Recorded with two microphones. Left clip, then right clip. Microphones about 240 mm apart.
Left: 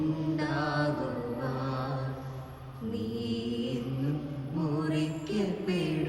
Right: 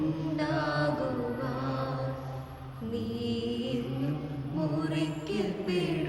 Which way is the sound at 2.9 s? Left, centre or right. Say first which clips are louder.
Right 2 dB; centre.